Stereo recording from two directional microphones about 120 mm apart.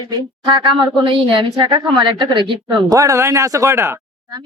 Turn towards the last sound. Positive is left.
turn(degrees=-25)  # may be behind; listen again after turning